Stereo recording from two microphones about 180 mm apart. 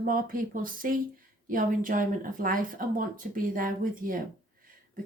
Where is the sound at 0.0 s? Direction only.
50° right (ahead or behind).